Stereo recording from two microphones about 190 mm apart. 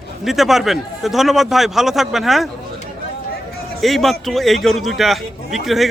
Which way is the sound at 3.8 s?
Centre (ahead or behind).